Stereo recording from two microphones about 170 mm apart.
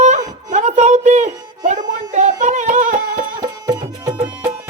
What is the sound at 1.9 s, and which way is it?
Music, 45° right (ahead or behind).